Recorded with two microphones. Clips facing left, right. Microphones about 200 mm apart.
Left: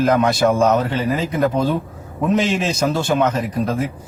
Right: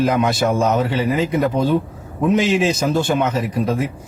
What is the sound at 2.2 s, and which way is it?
A man's voice, 5° right (ahead or behind).